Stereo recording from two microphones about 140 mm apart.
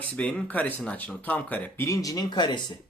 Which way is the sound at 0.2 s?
10° left (ahead or behind).